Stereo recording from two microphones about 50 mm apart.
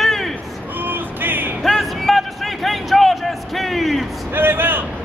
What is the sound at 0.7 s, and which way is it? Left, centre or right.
Music, right.